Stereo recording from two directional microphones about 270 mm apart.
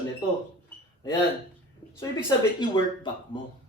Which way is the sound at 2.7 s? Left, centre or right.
Centre.